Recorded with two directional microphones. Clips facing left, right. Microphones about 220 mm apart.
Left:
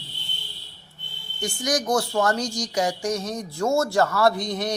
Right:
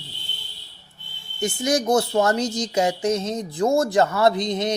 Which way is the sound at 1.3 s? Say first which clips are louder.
Right 4 dB; 25° right (ahead or behind).